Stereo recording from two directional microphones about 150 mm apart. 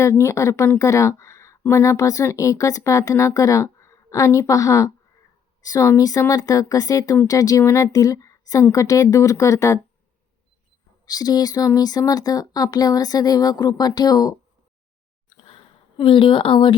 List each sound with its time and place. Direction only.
0.0 s speech: 20° left (ahead or behind)
11.0 s speech: 25° left (ahead or behind)
15.4 s a sound: 35° left (ahead or behind)